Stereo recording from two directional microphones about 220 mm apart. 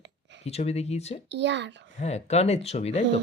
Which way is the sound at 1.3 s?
55° right (ahead or behind).